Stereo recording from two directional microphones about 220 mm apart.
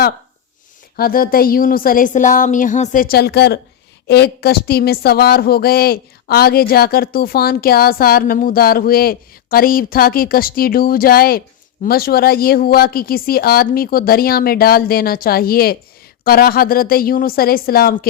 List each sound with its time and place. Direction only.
0.9 s speech: 40° left (ahead or behind)